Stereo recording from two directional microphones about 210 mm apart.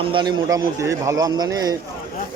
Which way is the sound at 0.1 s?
20° right (ahead or behind).